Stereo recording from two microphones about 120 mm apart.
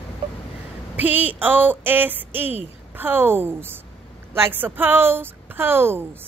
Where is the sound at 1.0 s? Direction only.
15° right (ahead or behind).